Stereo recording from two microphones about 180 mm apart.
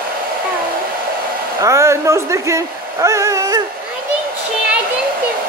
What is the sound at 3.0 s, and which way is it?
Dog, 15° right (ahead or behind).